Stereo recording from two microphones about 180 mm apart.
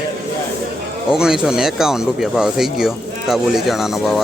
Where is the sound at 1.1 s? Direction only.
5° right (ahead or behind).